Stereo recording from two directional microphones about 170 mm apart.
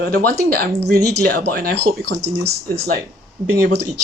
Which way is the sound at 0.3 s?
65° right (ahead or behind).